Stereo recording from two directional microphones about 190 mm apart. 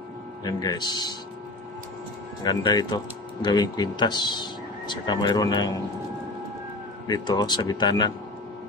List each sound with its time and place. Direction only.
0.4 s speech: 20° left (ahead or behind)
2.4 s speech: 20° left (ahead or behind)
7.1 s speech: 20° left (ahead or behind)